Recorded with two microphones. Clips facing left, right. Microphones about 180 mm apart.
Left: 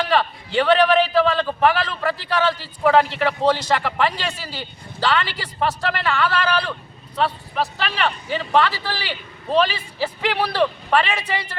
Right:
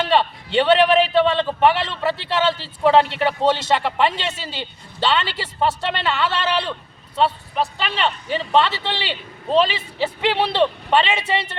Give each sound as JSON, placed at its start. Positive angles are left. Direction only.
{"t": 0.0, "sound": "a man's voice", "side_deg": -25}
{"t": 7.9, "sound": "a man's voice", "side_deg": -25}